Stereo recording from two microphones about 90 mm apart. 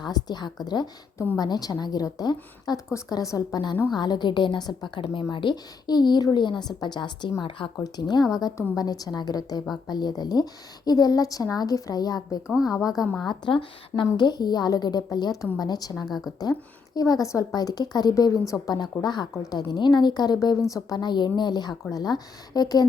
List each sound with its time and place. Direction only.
0.0 s a woman's voice: 50° left (ahead or behind)
5.3 s a woman's voice: 65° left (ahead or behind)
7.6 s speech: 75° left (ahead or behind)
7.9 s a woman's voice: 50° left (ahead or behind)
13.2 s a woman's voice: 65° left (ahead or behind); by 16.0 s 50° left (ahead or behind)
16.0 s a woman's voice: centre (ahead or behind)
16.4 s a woman's voice: 45° left (ahead or behind)
19.3 s a woman's voice: 35° left (ahead or behind)
19.5 s a woman's voice: 50° left (ahead or behind)
21.0 s a woman's voice: 55° left (ahead or behind)